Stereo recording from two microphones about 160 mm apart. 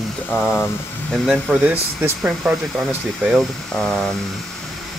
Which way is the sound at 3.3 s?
Centre (ahead or behind).